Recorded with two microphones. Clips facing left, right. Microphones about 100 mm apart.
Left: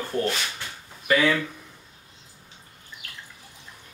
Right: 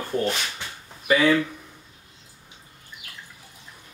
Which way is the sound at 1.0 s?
15° right (ahead or behind).